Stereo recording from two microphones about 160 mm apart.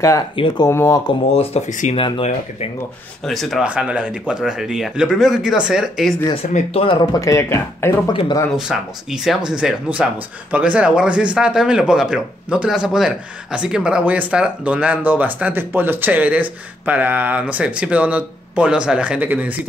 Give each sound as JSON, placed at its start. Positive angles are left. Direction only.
{"t": 0.7, "sound": "speech", "side_deg": 15}
{"t": 1.3, "sound": "speech", "side_deg": 40}
{"t": 2.0, "sound": "speech", "side_deg": 30}
{"t": 3.3, "sound": "speech", "side_deg": 0}
{"t": 6.5, "sound": "speech", "side_deg": 35}
{"t": 7.2, "sound": "speech", "side_deg": 20}
{"t": 8.1, "sound": "speech", "side_deg": 30}
{"t": 8.5, "sound": "speech", "side_deg": -5}